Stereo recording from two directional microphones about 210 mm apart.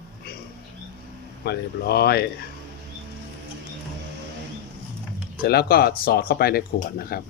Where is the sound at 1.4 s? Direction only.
50° left (ahead or behind).